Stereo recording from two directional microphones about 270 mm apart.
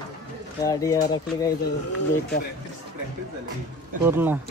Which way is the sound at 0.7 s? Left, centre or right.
Centre.